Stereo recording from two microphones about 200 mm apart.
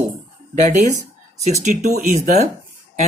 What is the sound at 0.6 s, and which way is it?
Speech, 40° right (ahead or behind).